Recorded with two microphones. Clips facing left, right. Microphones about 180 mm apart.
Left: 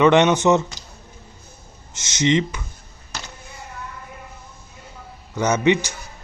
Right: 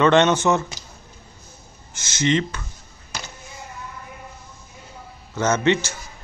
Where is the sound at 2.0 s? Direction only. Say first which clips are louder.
Left 2 dB; 20° left (ahead or behind).